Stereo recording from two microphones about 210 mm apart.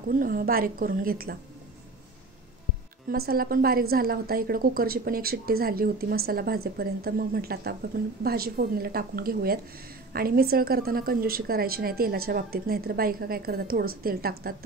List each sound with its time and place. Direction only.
0.1 s a woman's voice: 40° right (ahead or behind)
3.1 s a woman's voice: 45° right (ahead or behind)